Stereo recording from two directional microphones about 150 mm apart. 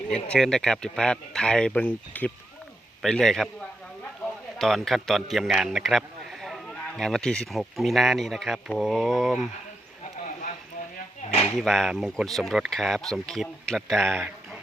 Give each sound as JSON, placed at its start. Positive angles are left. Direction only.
{"t": 0.1, "sound": "a man's voice", "side_deg": 5}
{"t": 4.5, "sound": "a man's voice", "side_deg": 0}
{"t": 11.2, "sound": "a sound", "side_deg": 40}
{"t": 11.5, "sound": "a man's voice", "side_deg": 0}